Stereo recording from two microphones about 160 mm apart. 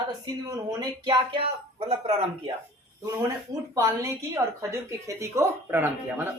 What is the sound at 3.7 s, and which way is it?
A woman's voice, 20° right (ahead or behind).